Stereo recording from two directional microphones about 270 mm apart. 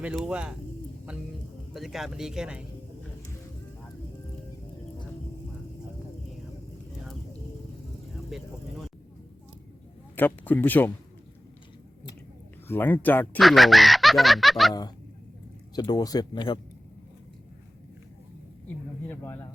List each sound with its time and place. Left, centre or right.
0.0 s speech: centre
1.7 s speech: centre
8.3 s speech: centre
10.2 s speech: centre
12.6 s speech: centre
14.7 s speech: centre
19.0 s speech: centre